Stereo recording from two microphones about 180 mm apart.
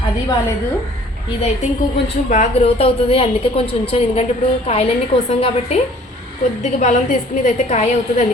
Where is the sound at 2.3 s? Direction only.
40° left (ahead or behind).